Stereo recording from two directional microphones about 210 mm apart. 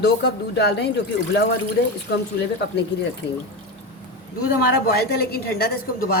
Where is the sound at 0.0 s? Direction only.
55° left (ahead or behind).